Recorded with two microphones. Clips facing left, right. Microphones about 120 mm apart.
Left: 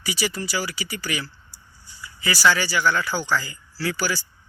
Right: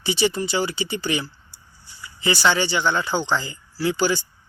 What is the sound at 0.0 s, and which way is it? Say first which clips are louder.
Speech: right 6 dB; 25° right (ahead or behind).